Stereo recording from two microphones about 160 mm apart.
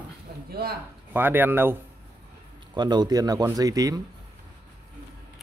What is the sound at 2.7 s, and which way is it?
A man's voice, 25° right (ahead or behind).